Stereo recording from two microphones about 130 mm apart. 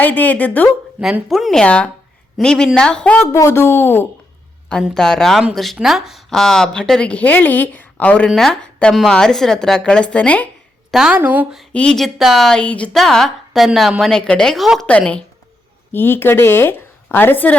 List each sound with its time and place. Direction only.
0.0 s a woman's voice: 15° left (ahead or behind)
0.9 s speech: 10° right (ahead or behind)
1.3 s a woman's voice: centre (ahead or behind); by 4.0 s 20° left (ahead or behind)
4.9 s a woman's voice: 5° left (ahead or behind)
10.9 s a woman's voice: 5° right (ahead or behind)
11.7 s a woman's voice: 5° left (ahead or behind)